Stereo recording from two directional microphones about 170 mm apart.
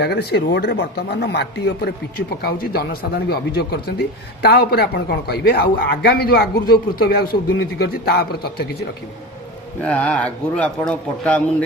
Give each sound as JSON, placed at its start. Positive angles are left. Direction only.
{"t": 0.0, "sound": "a man's voice", "side_deg": 70}
{"t": 9.8, "sound": "speech", "side_deg": 10}